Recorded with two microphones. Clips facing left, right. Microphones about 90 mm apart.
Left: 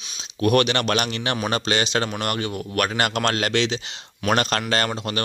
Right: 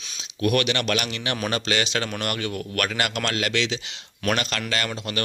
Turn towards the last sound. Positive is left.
turn(degrees=30)  # may be behind; listen again after turning